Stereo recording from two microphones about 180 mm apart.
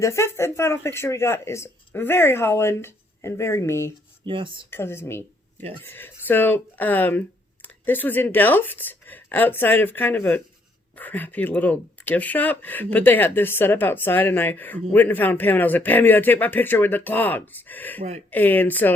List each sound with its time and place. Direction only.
0.0 s speech: 15° left (ahead or behind)
4.3 s speech: 30° right (ahead or behind)
4.7 s speech: 15° left (ahead or behind)